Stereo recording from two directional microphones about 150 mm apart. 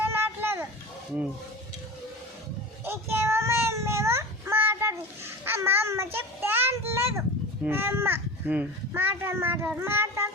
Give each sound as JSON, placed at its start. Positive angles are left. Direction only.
{"t": 0.0, "sound": "children playing", "side_deg": -15}
{"t": 2.8, "sound": "child singing", "side_deg": -15}
{"t": 7.6, "sound": "a child's voice", "side_deg": -15}